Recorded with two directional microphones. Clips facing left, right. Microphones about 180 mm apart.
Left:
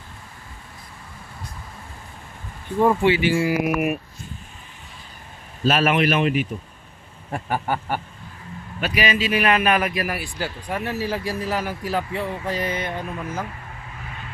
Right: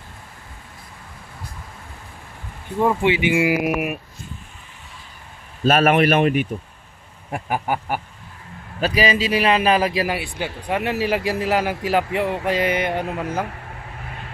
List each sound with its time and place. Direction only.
3.0 s speech: 15° right (ahead or behind)
5.7 s speech: 50° right (ahead or behind)
7.2 s speech: 10° right (ahead or behind)
8.8 s a man's voice: 35° right (ahead or behind)
10.8 s a man's voice: 75° right (ahead or behind)